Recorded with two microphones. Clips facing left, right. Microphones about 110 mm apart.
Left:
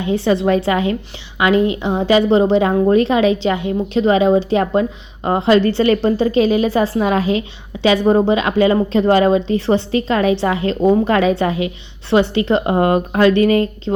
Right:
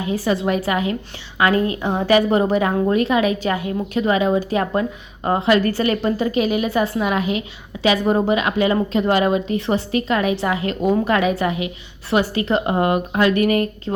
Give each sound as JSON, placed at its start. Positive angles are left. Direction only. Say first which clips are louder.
{"t": 0.0, "sound": "a woman's voice", "louder": "left 4 dB", "side_deg": 30}